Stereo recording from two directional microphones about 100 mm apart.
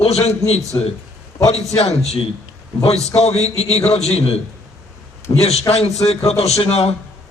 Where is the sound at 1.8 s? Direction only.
90° left.